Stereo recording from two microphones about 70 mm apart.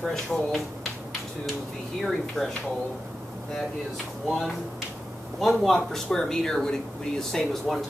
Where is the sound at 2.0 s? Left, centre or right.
Centre.